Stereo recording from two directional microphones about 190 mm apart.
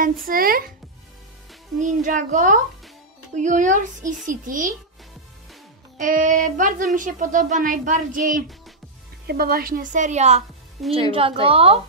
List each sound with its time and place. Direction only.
0.3 s speech: 50° right (ahead or behind)
1.8 s a child's voice: 40° right (ahead or behind)
5.9 s a woman's voice: 45° right (ahead or behind)